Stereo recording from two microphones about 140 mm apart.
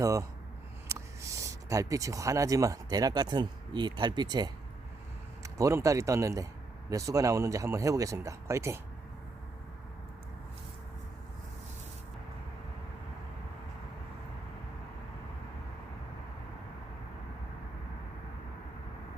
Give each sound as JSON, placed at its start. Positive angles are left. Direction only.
{"t": 0.0, "sound": "speech", "side_deg": -25}